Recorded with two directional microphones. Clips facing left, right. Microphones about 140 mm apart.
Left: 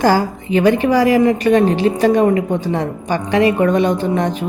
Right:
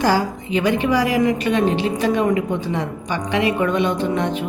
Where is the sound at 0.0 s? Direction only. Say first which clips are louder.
Left 4 dB; 45° left (ahead or behind).